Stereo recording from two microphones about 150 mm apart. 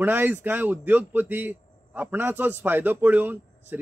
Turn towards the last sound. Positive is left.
turn(degrees=-10)  # may be behind; listen again after turning